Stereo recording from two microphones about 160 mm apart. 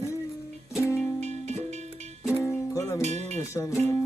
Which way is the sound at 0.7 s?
15° left (ahead or behind).